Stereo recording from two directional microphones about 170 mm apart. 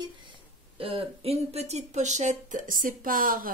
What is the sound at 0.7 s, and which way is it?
Speech, 35° right (ahead or behind).